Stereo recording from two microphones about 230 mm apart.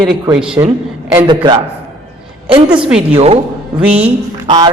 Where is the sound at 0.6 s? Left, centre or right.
Centre.